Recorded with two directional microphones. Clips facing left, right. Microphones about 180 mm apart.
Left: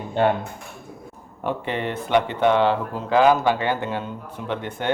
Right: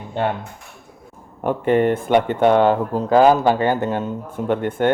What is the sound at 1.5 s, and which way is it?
Speech, 50° right (ahead or behind).